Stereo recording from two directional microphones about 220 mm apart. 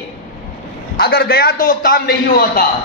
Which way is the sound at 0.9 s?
45° left (ahead or behind).